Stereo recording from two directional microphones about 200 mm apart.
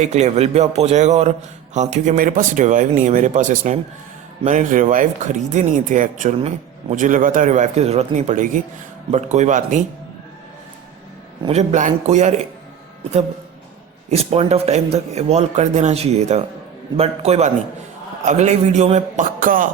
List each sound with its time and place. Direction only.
0.0 s speech: 35° right (ahead or behind)
11.4 s speech: 35° right (ahead or behind)
14.1 s speech: 30° right (ahead or behind)